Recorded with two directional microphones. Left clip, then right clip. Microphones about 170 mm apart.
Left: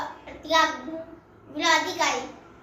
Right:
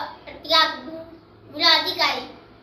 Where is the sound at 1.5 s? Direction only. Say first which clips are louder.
Right 4 dB; 15° left (ahead or behind).